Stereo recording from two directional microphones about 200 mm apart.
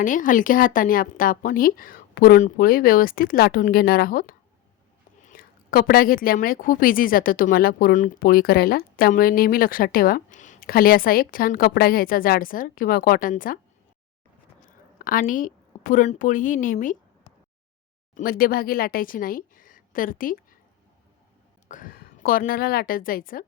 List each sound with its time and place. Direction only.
0.0 s a woman's voice: 40° left (ahead or behind)
14.7 s a woman's voice: 45° left (ahead or behind)
18.1 s speech: 45° left (ahead or behind)
21.7 s a woman's voice: 45° left (ahead or behind)